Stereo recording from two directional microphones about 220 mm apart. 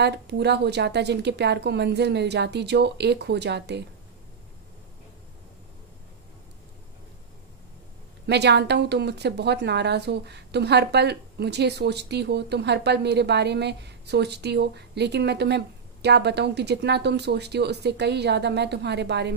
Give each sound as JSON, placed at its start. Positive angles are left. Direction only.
{"t": 0.0, "sound": "a woman's voice", "side_deg": -50}
{"t": 8.3, "sound": "a woman's voice", "side_deg": -50}